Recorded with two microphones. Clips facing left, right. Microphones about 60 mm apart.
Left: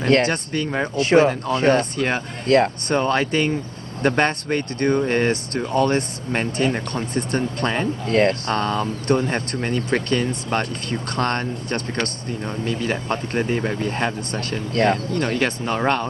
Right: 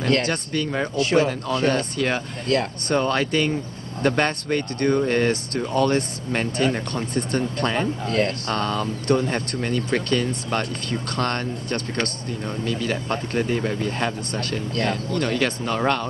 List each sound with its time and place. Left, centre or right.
0.3 s speech: left
0.9 s speech: left
2.4 s speech: left
2.9 s speech: centre
8.1 s speech: left
8.5 s speech: left